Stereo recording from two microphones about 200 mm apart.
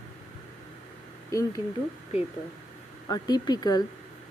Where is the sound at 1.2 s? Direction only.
15° left (ahead or behind).